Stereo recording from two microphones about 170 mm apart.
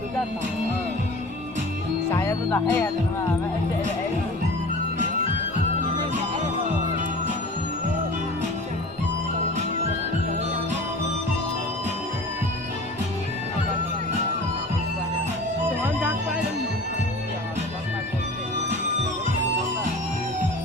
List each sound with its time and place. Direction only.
2.0 s speech: 15° left (ahead or behind)